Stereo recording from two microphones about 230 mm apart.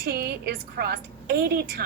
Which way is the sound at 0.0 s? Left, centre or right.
Right.